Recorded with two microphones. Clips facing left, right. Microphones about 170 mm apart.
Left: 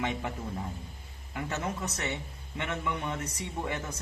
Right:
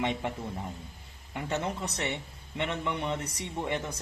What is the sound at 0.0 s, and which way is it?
Speech, 20° right (ahead or behind).